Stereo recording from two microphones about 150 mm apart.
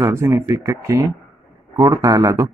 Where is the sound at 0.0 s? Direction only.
20° right (ahead or behind).